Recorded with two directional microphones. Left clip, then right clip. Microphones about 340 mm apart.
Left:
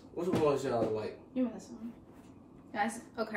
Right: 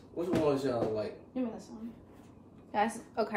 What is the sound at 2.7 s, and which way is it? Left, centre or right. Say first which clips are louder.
Speech: right 3 dB; centre.